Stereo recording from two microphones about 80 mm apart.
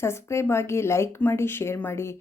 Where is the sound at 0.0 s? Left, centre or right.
Left.